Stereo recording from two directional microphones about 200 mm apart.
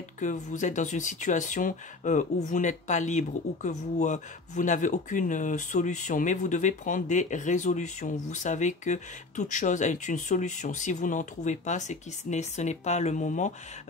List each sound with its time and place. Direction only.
0.2 s speech: 40° left (ahead or behind)